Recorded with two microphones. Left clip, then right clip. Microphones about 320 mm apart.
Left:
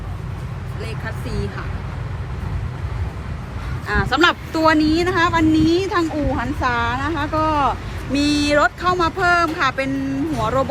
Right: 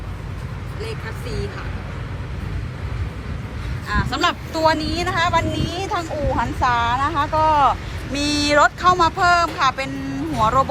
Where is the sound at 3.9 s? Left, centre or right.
Centre.